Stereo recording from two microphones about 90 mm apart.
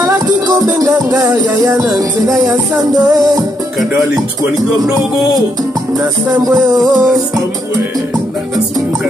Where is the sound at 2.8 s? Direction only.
45° right (ahead or behind).